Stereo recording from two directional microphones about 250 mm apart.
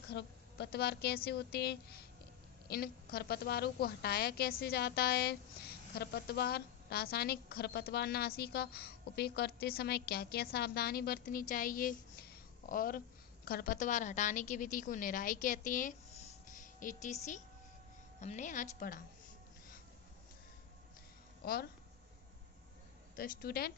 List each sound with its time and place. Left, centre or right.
0.1 s a woman's voice: left
21.4 s a woman's voice: left
23.1 s a woman's voice: left